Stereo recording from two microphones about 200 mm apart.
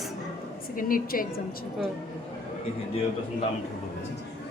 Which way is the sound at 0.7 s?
45° left (ahead or behind).